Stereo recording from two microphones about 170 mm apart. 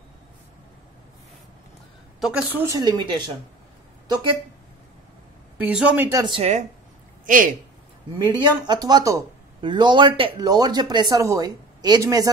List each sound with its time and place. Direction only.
2.1 s a sound: 5° right (ahead or behind)
2.6 s speech: 20° right (ahead or behind)
5.6 s speech: 5° right (ahead or behind)
6.1 s speech: 30° right (ahead or behind)
7.2 s speech: 50° right (ahead or behind)
8.3 s speech: 25° right (ahead or behind)